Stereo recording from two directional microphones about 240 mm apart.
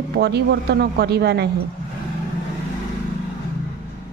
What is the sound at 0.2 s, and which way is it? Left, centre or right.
Speech, right.